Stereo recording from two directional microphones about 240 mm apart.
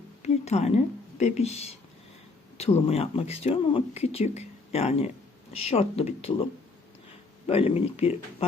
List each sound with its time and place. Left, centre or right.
0.2 s a sound: left
1.2 s speech: left
7.4 s speech: left